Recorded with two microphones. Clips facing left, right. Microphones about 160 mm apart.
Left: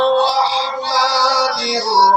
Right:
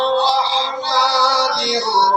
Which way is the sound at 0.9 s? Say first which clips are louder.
Even; 5° left (ahead or behind).